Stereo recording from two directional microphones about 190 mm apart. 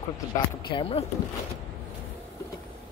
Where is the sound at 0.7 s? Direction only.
30° left (ahead or behind).